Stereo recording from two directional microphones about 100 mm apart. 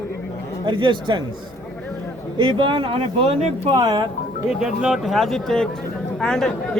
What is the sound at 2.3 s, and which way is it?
Speech, 50° right (ahead or behind).